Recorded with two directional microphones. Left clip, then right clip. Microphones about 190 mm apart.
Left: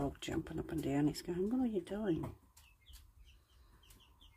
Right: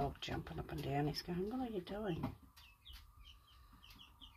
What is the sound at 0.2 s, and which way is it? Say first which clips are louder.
Speech: left 4 dB; 50° left (ahead or behind).